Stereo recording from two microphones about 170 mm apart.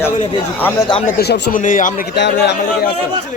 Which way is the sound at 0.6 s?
10° left (ahead or behind).